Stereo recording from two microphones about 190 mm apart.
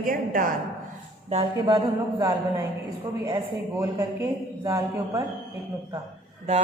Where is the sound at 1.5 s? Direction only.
25° right (ahead or behind).